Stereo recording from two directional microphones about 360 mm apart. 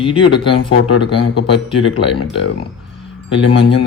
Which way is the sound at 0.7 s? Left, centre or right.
Left.